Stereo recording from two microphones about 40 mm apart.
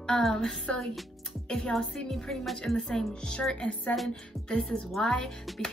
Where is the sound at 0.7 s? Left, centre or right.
Left.